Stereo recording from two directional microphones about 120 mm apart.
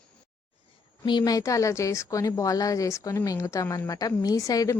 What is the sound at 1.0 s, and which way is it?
Speech, 35° left (ahead or behind).